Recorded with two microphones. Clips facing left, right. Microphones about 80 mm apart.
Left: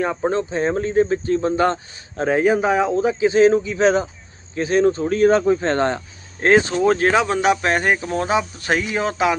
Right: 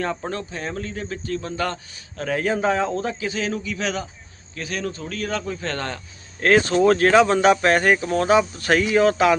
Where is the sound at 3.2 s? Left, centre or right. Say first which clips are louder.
Left 12 dB; left.